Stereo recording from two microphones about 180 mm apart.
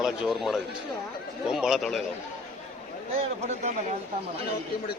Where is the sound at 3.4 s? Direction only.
40° right (ahead or behind).